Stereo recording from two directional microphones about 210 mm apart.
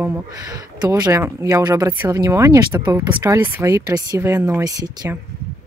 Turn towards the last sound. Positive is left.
turn(degrees=-20)  # may be behind; listen again after turning